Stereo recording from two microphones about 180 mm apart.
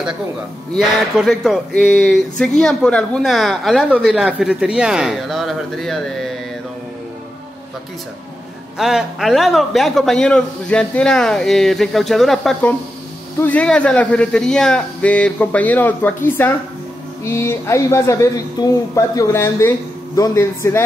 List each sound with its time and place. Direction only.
0.7 s a woman's voice: centre (ahead or behind)
8.7 s a woman's voice: centre (ahead or behind); by 20.8 s 15° left (ahead or behind)